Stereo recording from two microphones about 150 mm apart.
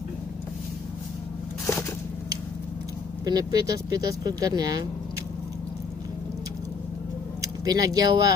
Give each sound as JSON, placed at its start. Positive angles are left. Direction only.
{"t": 3.3, "sound": "speech", "side_deg": -25}
{"t": 7.6, "sound": "speech", "side_deg": -25}